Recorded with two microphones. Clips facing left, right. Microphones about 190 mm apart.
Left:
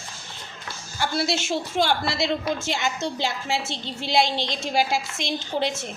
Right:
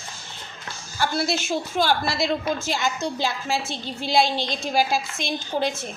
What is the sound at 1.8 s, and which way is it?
A woman's voice, 25° left (ahead or behind).